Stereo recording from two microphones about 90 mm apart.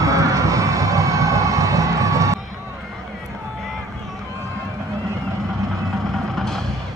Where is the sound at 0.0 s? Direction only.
40° right (ahead or behind).